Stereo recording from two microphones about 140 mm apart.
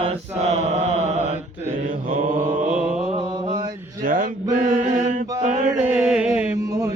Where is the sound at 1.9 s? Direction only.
65° right (ahead or behind).